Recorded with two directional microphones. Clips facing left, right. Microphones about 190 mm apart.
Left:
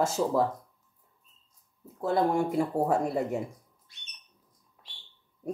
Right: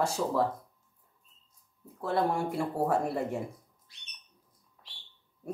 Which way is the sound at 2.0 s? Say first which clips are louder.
Left 3 dB; 20° left (ahead or behind).